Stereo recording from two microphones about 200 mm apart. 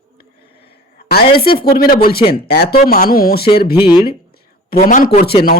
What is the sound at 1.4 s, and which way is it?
Speech, 50° left (ahead or behind).